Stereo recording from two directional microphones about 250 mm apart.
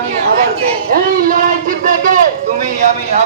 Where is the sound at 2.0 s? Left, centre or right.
Right.